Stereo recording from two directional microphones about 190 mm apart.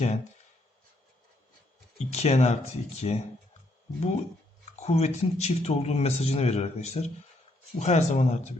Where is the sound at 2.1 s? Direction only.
35° left (ahead or behind).